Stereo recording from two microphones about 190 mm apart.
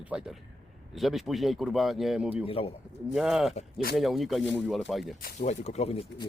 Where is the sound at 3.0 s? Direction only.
Centre (ahead or behind).